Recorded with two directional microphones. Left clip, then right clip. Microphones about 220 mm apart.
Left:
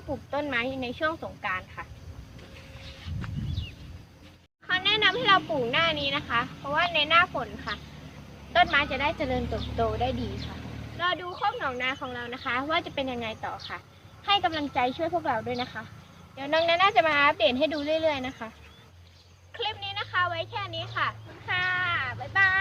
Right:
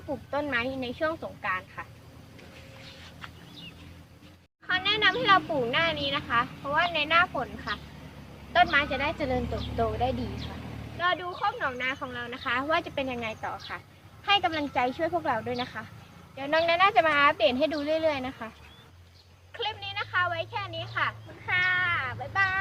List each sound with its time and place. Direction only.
0.1 s speech: centre (ahead or behind)
4.7 s speech: centre (ahead or behind)
10.9 s a woman's voice: 5° right (ahead or behind)
19.5 s a sound: 10° right (ahead or behind)